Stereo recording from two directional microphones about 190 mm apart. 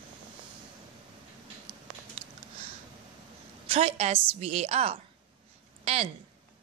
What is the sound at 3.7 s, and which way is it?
A woman's voice, 30° right (ahead or behind).